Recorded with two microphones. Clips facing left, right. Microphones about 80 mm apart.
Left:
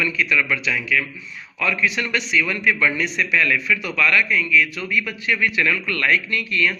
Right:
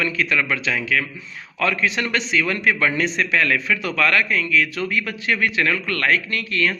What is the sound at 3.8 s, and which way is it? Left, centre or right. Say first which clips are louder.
Speech: right 1 dB; right.